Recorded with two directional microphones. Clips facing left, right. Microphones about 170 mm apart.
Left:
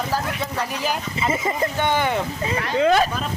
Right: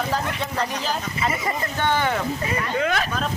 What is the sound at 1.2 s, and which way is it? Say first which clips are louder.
Speech: left 5 dB; 20° left (ahead or behind).